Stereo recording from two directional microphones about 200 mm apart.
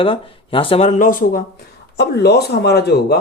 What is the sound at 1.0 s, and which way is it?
Speech, 45° left (ahead or behind).